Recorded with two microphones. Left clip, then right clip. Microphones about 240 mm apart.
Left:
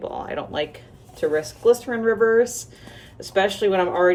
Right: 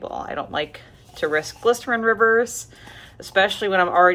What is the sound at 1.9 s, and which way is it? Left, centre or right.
Speech, centre.